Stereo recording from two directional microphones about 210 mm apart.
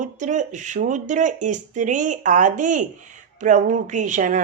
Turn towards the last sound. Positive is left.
turn(degrees=-35)  # may be behind; listen again after turning